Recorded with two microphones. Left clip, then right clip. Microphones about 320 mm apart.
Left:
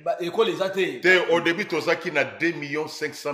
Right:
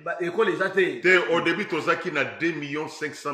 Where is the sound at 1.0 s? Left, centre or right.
Left.